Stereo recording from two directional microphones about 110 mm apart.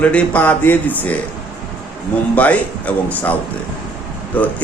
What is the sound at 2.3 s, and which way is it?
Speech, 15° left (ahead or behind).